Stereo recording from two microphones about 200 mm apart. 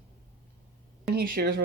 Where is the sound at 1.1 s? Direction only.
50° right (ahead or behind).